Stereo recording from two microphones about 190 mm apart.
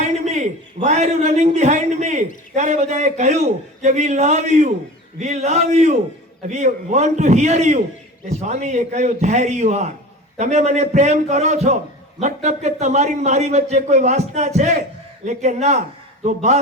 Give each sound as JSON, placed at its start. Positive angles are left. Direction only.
{"t": 0.3, "sound": "a man's voice", "side_deg": -35}